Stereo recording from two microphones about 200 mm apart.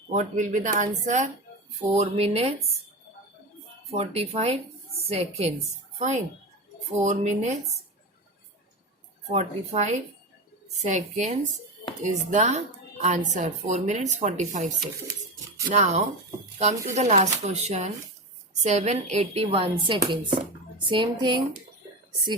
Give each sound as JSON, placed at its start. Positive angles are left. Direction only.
{"t": 0.1, "sound": "speech", "side_deg": -35}
{"t": 3.9, "sound": "speech", "side_deg": -30}
{"t": 9.3, "sound": "speech", "side_deg": -35}
{"t": 15.7, "sound": "speech", "side_deg": -35}
{"t": 18.6, "sound": "chopping", "side_deg": -35}